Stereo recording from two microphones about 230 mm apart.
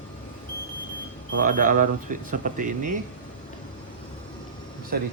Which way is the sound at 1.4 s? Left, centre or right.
Right.